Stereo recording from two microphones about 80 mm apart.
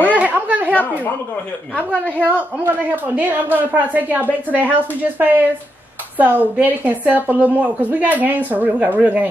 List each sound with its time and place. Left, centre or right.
0.1 s chatter: centre
2.1 s a woman's voice: right